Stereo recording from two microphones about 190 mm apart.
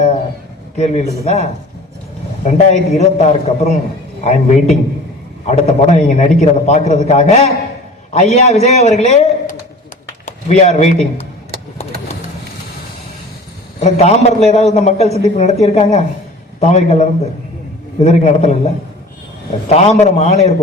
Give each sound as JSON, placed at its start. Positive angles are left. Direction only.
{"t": 0.8, "sound": "a man's voice", "side_deg": 35}
{"t": 13.7, "sound": "a man's voice", "side_deg": 35}